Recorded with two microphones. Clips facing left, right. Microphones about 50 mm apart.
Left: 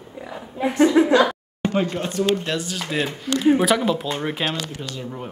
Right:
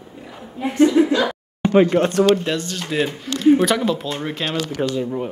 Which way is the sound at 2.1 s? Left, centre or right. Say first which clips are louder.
Right 6 dB; right.